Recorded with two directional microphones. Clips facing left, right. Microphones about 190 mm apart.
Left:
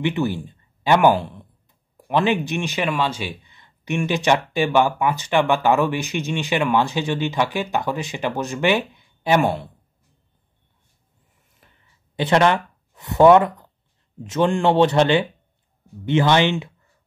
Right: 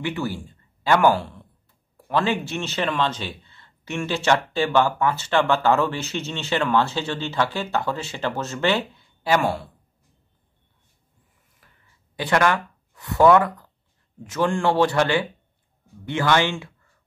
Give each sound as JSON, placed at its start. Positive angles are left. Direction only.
{"t": 0.0, "sound": "speech", "side_deg": 20}
{"t": 11.6, "sound": "a sound", "side_deg": 25}
{"t": 12.2, "sound": "speech", "side_deg": 20}